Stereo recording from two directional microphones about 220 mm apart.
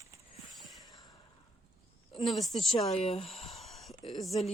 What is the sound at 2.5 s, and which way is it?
Speech, 25° left (ahead or behind).